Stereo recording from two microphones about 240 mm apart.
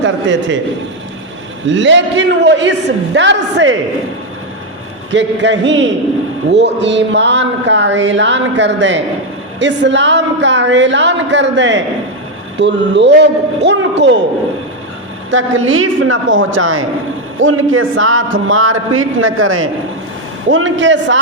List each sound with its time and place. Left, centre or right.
0.0 s speech: right
1.6 s speech: right
5.1 s speech: right
15.3 s a man's voice: right